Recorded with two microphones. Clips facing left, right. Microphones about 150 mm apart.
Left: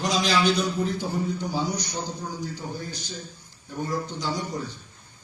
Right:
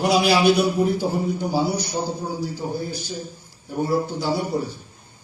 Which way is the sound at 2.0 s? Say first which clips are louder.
Right 6 dB; 10° right (ahead or behind).